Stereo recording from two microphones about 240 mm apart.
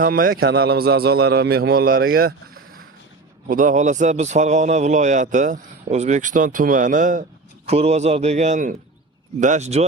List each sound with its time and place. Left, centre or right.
0.0 s a man's voice: right
3.5 s a man's voice: right